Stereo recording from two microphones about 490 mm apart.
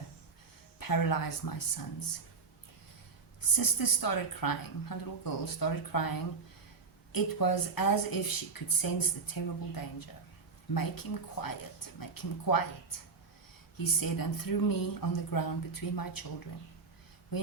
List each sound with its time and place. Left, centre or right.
0.8 s speech: left
3.5 s speech: left
13.7 s speech: left